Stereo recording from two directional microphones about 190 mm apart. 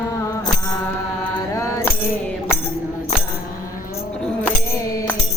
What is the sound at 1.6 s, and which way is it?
Mantra, 15° left (ahead or behind).